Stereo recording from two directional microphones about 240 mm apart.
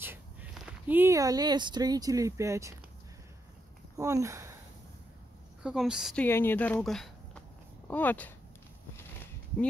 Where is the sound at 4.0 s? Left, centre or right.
Centre.